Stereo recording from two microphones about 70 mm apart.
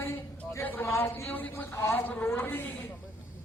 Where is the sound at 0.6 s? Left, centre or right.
Left.